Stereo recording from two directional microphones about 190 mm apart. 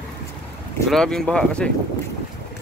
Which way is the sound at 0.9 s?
5° left (ahead or behind).